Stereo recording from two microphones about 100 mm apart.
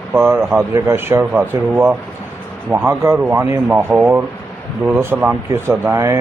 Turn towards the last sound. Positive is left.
turn(degrees=-25)  # may be behind; listen again after turning